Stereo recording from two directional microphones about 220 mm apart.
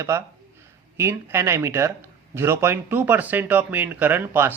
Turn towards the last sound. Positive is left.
turn(degrees=-10)  # may be behind; listen again after turning